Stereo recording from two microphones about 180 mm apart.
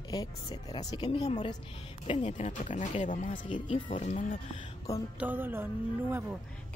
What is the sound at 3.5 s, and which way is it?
Speech, 30° left (ahead or behind).